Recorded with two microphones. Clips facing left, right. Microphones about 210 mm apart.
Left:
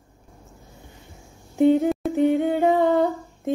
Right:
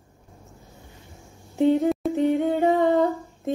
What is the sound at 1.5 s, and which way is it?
Humming, centre (ahead or behind).